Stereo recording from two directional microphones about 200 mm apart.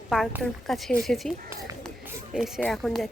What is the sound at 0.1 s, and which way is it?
Speech, centre (ahead or behind).